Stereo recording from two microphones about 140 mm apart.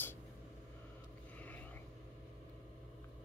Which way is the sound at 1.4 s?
10° left (ahead or behind).